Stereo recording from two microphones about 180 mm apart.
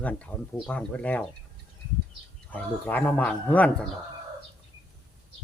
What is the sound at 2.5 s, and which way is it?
Speech, 10° left (ahead or behind).